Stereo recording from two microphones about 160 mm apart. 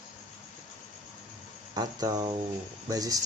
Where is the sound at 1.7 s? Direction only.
25° right (ahead or behind).